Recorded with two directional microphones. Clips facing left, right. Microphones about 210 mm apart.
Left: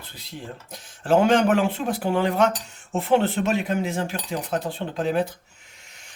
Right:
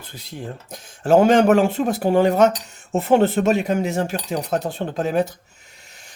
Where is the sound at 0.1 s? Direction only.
45° right (ahead or behind).